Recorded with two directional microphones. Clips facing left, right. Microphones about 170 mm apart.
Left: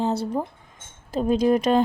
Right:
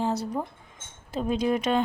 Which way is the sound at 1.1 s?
40° left (ahead or behind).